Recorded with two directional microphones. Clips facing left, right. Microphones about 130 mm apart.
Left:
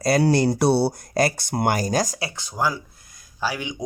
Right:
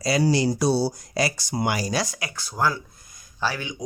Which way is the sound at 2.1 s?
25° left (ahead or behind).